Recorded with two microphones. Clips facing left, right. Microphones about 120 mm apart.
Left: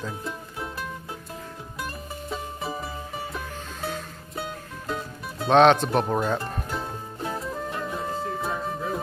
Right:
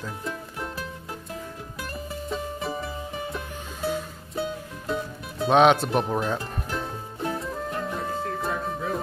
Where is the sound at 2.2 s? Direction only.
Centre (ahead or behind).